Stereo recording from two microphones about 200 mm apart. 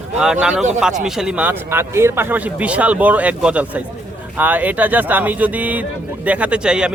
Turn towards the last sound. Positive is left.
turn(degrees=-5)  # may be behind; listen again after turning